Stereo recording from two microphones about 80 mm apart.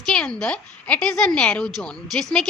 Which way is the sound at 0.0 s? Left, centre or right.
Centre.